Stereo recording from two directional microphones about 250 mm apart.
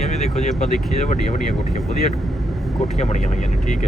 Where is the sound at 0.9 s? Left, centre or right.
Left.